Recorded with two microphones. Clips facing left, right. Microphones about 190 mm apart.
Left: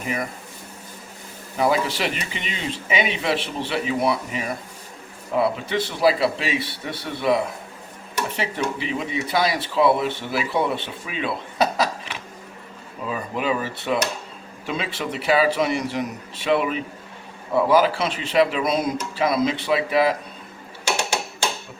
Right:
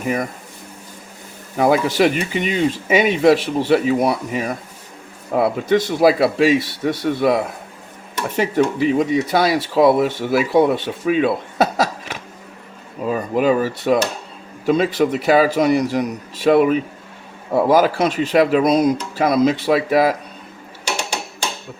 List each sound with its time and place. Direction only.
1.5 s speech: 50° right (ahead or behind)
8.4 s speech: 45° right (ahead or behind)